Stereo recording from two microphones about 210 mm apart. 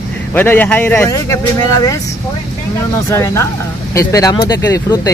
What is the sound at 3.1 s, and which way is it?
Speech, 15° left (ahead or behind).